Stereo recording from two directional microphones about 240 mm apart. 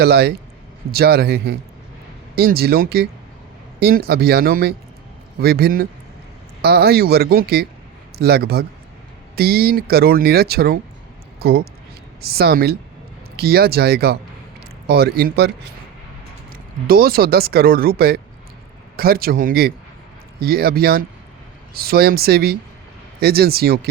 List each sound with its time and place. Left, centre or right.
0.0 s speech: right
16.8 s speech: right